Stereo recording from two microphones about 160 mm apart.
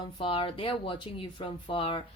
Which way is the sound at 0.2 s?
35° left (ahead or behind).